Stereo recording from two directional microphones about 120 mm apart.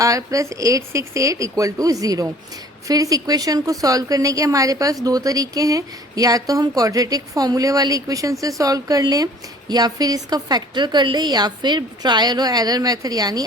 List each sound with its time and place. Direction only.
0.0 s speech: 30° right (ahead or behind)